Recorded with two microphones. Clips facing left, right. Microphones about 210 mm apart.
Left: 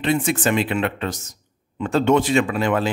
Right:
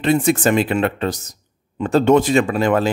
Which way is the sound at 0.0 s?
40° right (ahead or behind).